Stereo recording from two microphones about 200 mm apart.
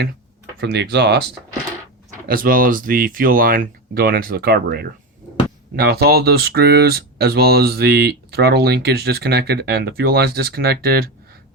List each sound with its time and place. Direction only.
0.6 s speech: 60° right (ahead or behind)
2.2 s speech: 45° right (ahead or behind)